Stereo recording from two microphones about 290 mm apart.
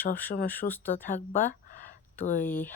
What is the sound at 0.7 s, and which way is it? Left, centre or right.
Speech, centre.